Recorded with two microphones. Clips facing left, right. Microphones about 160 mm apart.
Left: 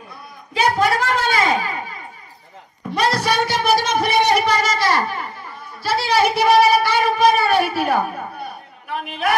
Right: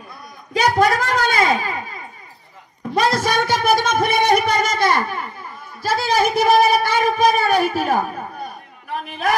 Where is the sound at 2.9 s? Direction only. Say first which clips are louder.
Right 1 dB; 45° right (ahead or behind).